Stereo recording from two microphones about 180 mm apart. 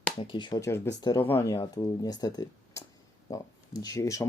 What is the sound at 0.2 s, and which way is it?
Speech, 25° left (ahead or behind).